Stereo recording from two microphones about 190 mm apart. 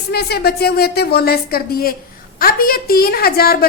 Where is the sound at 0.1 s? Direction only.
55° left (ahead or behind).